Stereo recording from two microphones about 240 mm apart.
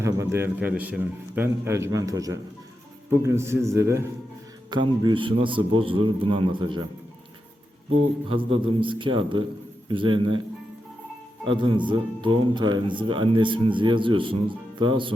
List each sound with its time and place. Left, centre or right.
0.0 s a man's voice: centre
8.3 s speech: right
11.4 s speech: right